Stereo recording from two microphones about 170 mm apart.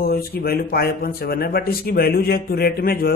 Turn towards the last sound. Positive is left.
turn(degrees=60)  # may be behind; listen again after turning